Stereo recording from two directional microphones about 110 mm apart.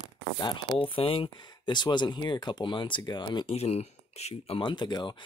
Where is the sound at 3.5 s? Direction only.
75° left (ahead or behind).